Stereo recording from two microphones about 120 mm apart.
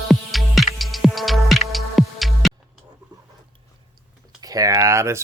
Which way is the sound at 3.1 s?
35° right (ahead or behind).